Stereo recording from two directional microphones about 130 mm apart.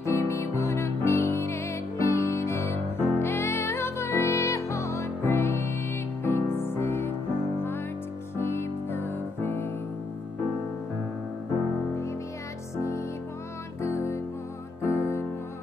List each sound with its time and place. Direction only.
0.0 s music: 20° left (ahead or behind)
8.4 s music: 20° left (ahead or behind)
12.7 s music: 20° left (ahead or behind)